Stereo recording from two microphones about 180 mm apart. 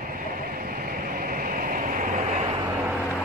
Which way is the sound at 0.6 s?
55° right (ahead or behind).